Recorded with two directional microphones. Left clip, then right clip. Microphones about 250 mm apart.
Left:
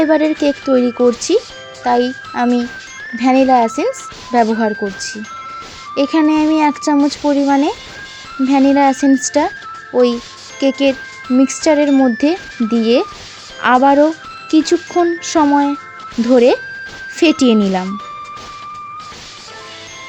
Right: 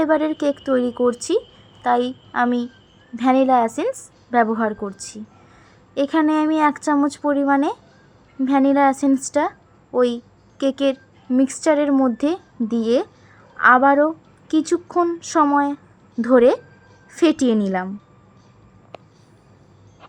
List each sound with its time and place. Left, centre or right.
0.0 s speech: centre
5.9 s speech: centre